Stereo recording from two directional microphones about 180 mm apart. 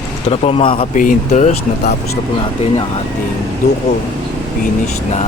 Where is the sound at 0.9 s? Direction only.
45° left (ahead or behind).